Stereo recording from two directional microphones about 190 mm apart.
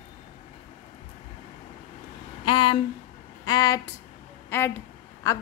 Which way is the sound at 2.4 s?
25° left (ahead or behind).